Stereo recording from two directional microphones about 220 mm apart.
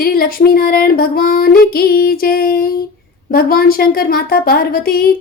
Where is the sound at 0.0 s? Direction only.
40° left (ahead or behind).